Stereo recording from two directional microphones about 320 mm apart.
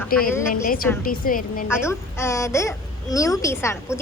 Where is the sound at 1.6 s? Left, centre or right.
Centre.